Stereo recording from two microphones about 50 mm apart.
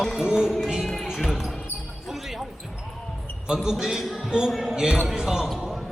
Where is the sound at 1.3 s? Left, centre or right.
Centre.